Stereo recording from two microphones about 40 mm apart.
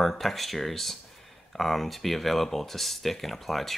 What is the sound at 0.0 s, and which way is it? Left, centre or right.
Speech, centre.